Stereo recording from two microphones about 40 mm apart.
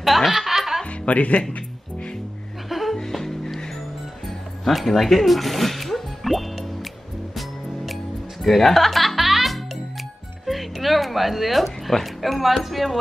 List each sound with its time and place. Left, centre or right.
0.0 s snicker: centre
0.8 s speech: left
2.7 s music: centre
3.0 s music: centre
10.4 s speech: centre